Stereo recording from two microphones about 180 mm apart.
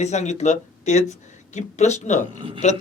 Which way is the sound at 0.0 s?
40° left (ahead or behind).